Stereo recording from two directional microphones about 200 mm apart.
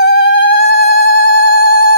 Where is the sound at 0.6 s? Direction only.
50° left (ahead or behind).